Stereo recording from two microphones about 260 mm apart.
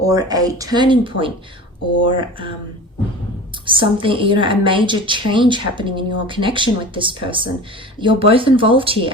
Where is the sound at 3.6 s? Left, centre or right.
Centre.